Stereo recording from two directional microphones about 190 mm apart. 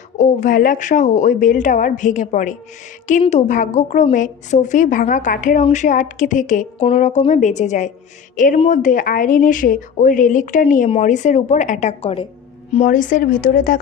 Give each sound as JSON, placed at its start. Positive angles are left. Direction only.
{"t": 0.2, "sound": "a woman's voice", "side_deg": 45}
{"t": 12.8, "sound": "a woman's voice", "side_deg": 40}